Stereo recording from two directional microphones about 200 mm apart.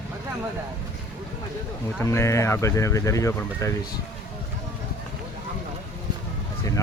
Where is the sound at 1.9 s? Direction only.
15° left (ahead or behind).